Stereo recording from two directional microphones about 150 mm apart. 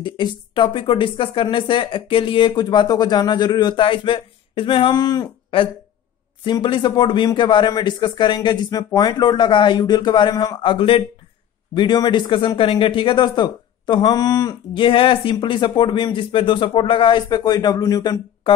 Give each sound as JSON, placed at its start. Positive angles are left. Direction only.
{"t": 0.0, "sound": "speech", "side_deg": 35}